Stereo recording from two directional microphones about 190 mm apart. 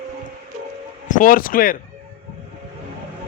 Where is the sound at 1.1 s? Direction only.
45° left (ahead or behind).